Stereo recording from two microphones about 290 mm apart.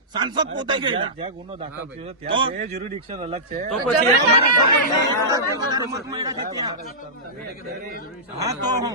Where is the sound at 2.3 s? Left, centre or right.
Centre.